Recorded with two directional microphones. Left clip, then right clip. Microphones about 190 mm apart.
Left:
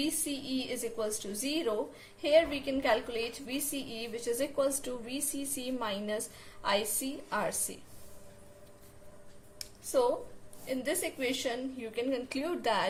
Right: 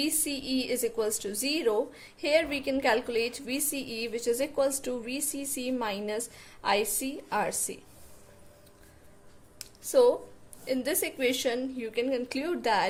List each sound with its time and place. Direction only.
0.0 s a woman's voice: 55° right (ahead or behind)
10.7 s a woman's voice: 50° right (ahead or behind)